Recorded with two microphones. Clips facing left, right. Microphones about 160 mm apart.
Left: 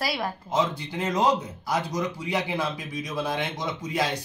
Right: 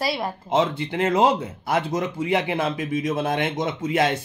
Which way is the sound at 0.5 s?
60° right (ahead or behind).